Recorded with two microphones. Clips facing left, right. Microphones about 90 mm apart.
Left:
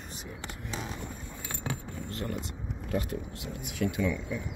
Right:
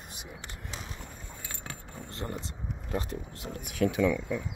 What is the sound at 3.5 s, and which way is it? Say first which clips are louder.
Speech: right 4 dB; 60° right (ahead or behind).